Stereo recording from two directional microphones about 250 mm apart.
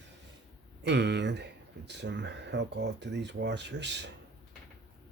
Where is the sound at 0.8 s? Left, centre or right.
Right.